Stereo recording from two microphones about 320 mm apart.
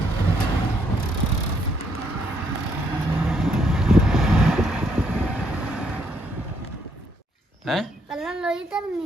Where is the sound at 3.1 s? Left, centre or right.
Centre.